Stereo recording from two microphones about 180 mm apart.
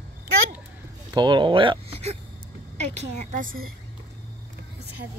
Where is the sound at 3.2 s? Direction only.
45° right (ahead or behind).